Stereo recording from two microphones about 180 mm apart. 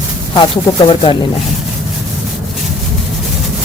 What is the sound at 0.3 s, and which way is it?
Speech, 30° left (ahead or behind).